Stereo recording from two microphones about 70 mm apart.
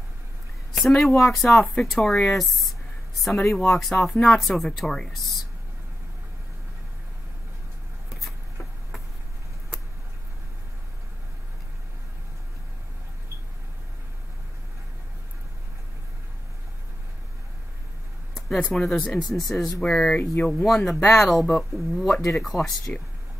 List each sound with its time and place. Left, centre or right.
0.7 s speech: centre
18.6 s speech: centre
20.6 s speech: centre